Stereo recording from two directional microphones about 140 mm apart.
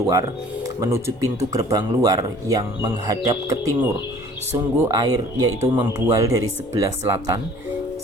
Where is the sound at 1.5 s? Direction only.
25° right (ahead or behind).